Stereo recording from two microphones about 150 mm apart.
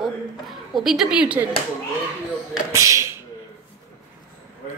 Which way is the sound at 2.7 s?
20° right (ahead or behind).